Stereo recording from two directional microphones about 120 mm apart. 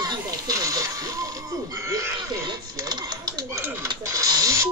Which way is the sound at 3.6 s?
20° right (ahead or behind).